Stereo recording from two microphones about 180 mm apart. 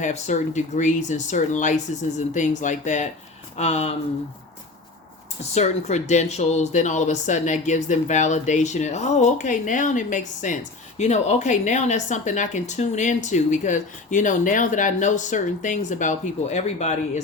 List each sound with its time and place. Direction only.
0.0 s speech: 40° left (ahead or behind)
5.4 s speech: 40° left (ahead or behind)